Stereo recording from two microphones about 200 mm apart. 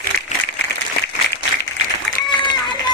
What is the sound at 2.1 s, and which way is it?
Run, 65° left (ahead or behind).